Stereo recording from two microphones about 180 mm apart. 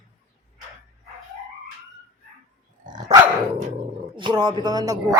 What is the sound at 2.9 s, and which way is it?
Dog, 20° right (ahead or behind).